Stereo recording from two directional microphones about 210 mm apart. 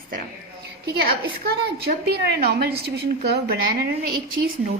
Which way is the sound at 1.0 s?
50° right (ahead or behind).